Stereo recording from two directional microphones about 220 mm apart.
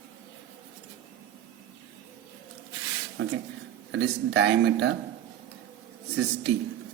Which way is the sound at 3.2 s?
65° right (ahead or behind).